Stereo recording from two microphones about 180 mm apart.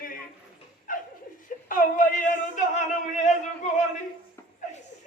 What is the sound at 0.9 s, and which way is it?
Laughter, 50° left (ahead or behind).